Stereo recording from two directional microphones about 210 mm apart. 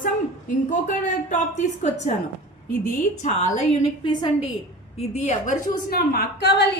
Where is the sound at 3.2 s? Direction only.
30° left (ahead or behind).